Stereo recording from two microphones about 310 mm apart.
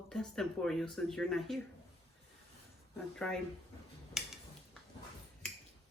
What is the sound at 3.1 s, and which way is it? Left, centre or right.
Speech, centre.